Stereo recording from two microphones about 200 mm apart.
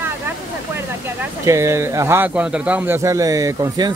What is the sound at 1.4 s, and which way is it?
A man's voice, 15° right (ahead or behind).